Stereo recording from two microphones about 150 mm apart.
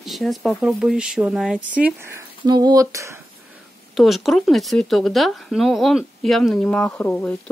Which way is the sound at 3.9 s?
Centre (ahead or behind).